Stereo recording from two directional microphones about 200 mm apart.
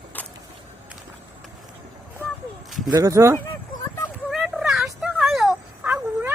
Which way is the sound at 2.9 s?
15° right (ahead or behind).